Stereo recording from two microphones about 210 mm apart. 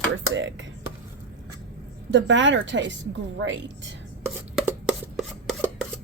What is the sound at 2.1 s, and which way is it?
A woman's voice, 60° right (ahead or behind).